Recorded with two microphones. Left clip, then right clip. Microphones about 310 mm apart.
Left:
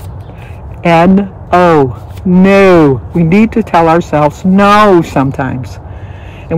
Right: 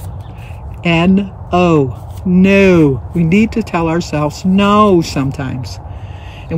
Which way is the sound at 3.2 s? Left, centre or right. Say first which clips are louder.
Left 3 dB; centre.